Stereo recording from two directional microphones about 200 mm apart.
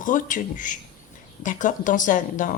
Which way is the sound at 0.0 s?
40° left (ahead or behind).